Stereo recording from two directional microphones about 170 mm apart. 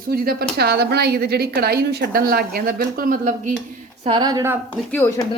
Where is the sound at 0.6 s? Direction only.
70° right (ahead or behind); by 3.5 s 50° right (ahead or behind).